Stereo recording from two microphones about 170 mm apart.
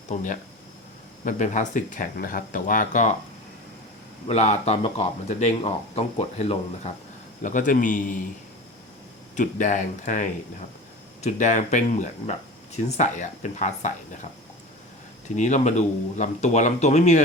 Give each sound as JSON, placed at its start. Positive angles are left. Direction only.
{"t": 0.1, "sound": "speech", "side_deg": 45}
{"t": 4.3, "sound": "speech", "side_deg": 40}
{"t": 7.4, "sound": "speech", "side_deg": 50}
{"t": 9.3, "sound": "speech", "side_deg": 45}
{"t": 15.4, "sound": "speech", "side_deg": 45}